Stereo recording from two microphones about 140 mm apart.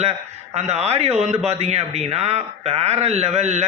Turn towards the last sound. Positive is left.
turn(degrees=-55)  # may be behind; listen again after turning